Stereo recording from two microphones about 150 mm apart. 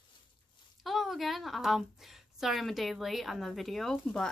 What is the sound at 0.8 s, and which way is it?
A woman's voice, centre (ahead or behind).